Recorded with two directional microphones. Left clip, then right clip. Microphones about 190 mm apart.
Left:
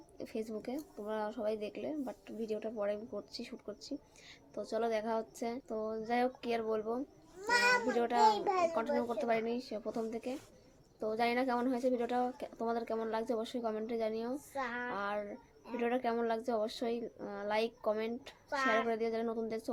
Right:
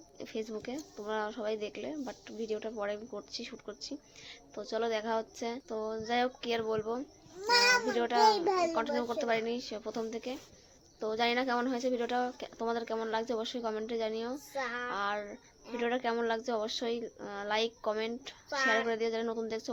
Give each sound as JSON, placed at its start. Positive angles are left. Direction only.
{"t": 0.2, "sound": "speech", "side_deg": 5}
{"t": 8.3, "sound": "a child's voice", "side_deg": -45}
{"t": 9.0, "sound": "speech", "side_deg": 5}
{"t": 14.5, "sound": "a child's voice", "side_deg": -45}
{"t": 14.8, "sound": "speech", "side_deg": 0}
{"t": 18.5, "sound": "speech", "side_deg": -40}
{"t": 18.9, "sound": "speech", "side_deg": 5}